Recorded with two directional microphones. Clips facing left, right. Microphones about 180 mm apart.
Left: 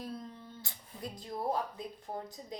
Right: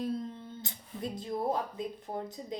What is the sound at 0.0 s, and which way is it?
Speech, 25° right (ahead or behind).